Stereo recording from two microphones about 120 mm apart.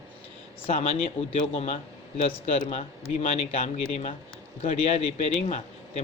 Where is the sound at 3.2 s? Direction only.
75° left (ahead or behind).